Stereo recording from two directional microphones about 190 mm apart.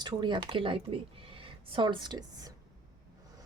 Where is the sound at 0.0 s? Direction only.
25° right (ahead or behind).